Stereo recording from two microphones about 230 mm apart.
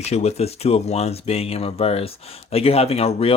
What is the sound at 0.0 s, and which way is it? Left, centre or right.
Speech, left.